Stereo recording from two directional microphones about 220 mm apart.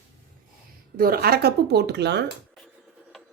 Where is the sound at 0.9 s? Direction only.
40° right (ahead or behind).